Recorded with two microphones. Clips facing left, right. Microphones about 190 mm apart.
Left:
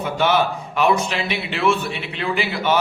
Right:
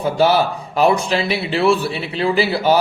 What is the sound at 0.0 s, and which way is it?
Speech, 35° right (ahead or behind).